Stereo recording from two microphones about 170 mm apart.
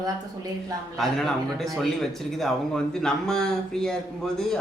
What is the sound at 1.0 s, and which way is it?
Speech, centre (ahead or behind).